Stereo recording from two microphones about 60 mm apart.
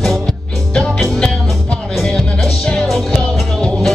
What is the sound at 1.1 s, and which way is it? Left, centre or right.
Music, centre.